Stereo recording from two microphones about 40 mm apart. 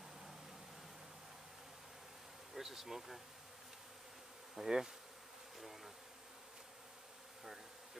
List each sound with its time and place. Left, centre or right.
2.5 s speech: centre
4.6 s bee: centre